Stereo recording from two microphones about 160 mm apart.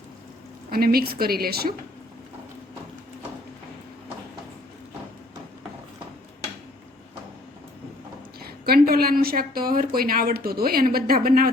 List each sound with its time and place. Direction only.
0.7 s a woman's voice: 70° right (ahead or behind)
8.4 s a woman's voice: 75° right (ahead or behind)